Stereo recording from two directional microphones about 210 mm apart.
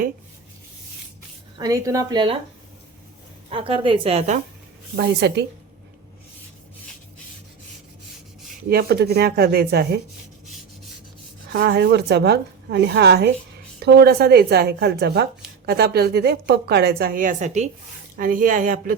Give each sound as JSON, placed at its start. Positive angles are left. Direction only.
{"t": 1.5, "sound": "speech", "side_deg": -15}
{"t": 3.5, "sound": "a woman's voice", "side_deg": -25}
{"t": 4.9, "sound": "a woman's voice", "side_deg": -55}
{"t": 8.7, "sound": "a woman's voice", "side_deg": -45}
{"t": 11.5, "sound": "a woman's voice", "side_deg": -50}